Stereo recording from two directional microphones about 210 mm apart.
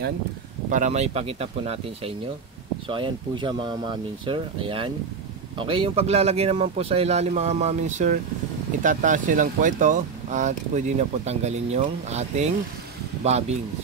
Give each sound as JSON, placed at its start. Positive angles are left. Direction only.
{"t": 0.7, "sound": "speech", "side_deg": -35}